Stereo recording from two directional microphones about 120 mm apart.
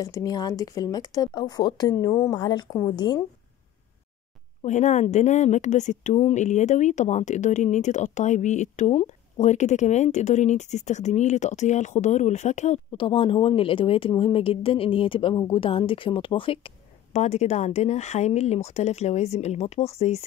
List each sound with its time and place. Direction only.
0.0 s speech: 30° left (ahead or behind)
4.6 s speech: 85° left
12.9 s a woman's voice: 45° left (ahead or behind)
17.2 s speech: 65° left (ahead or behind)